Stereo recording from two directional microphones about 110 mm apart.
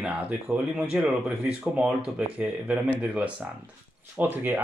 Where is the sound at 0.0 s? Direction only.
10° right (ahead or behind).